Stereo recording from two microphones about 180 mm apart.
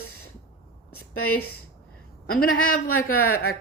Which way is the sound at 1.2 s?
60° left (ahead or behind).